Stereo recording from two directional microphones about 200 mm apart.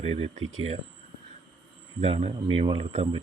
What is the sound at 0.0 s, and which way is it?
Speech, 30° right (ahead or behind).